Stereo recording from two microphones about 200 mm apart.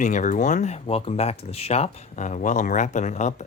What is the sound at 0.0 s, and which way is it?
Speech, 40° left (ahead or behind).